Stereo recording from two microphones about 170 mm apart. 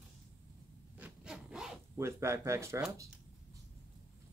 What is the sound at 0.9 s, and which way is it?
Sawing, 5° right (ahead or behind).